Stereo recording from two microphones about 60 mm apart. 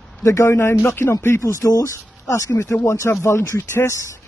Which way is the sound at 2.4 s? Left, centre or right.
Left.